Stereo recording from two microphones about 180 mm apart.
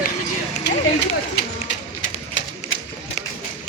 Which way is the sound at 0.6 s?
70° left (ahead or behind).